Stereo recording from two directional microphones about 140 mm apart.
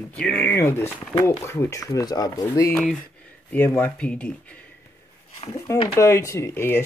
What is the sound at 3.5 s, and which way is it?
Speech, 15° left (ahead or behind).